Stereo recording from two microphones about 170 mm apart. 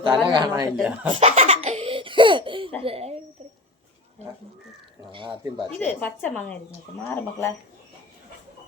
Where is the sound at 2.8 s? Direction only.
35° right (ahead or behind).